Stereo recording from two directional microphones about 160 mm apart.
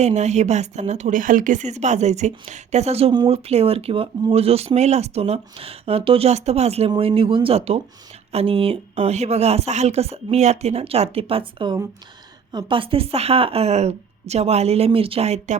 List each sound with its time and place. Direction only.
0.0 s a woman's voice: 45° right (ahead or behind)